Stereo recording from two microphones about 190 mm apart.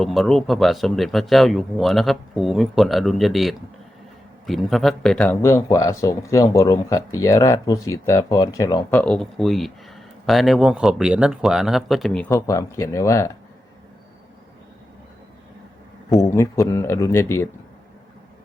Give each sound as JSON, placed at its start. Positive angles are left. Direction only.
{"t": 0.0, "sound": "speech", "side_deg": 0}
{"t": 12.3, "sound": "speech", "side_deg": 15}
{"t": 16.0, "sound": "speech", "side_deg": 15}